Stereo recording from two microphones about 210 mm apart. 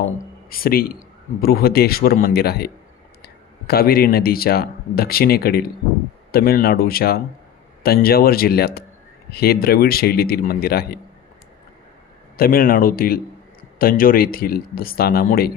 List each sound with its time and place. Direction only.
0.5 s speech: 45° left (ahead or behind)
12.4 s speech: 45° left (ahead or behind)